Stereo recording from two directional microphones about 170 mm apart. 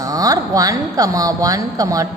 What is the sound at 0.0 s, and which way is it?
A woman's voice, 20° right (ahead or behind).